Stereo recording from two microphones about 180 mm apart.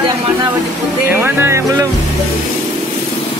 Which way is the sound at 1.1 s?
10° right (ahead or behind).